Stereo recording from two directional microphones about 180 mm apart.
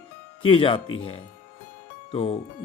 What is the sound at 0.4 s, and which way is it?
Speech, 30° left (ahead or behind).